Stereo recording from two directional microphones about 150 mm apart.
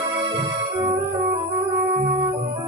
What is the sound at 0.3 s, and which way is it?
Music, 30° right (ahead or behind).